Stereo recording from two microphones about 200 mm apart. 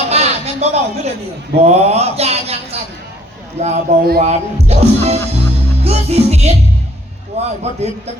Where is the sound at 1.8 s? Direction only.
30° right (ahead or behind).